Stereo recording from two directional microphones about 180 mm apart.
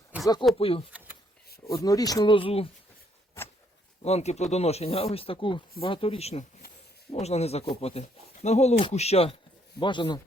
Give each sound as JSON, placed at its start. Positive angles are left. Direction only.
{"t": 0.1, "sound": "a sound", "side_deg": -10}
{"t": 0.6, "sound": "speech", "side_deg": 30}
{"t": 1.6, "sound": "speech", "side_deg": 20}
{"t": 4.0, "sound": "speech", "side_deg": 35}